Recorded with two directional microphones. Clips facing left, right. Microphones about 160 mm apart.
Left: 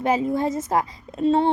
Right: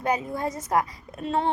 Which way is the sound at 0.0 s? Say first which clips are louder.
Left 5 dB; 25° left (ahead or behind).